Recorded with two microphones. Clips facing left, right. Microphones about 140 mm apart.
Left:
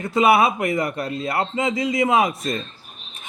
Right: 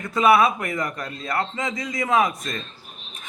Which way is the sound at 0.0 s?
30° left (ahead or behind).